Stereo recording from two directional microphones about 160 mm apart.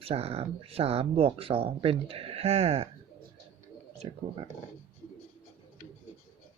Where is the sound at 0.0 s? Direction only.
35° right (ahead or behind).